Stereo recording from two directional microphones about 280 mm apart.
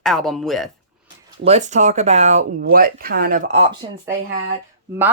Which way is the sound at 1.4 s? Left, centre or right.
Right.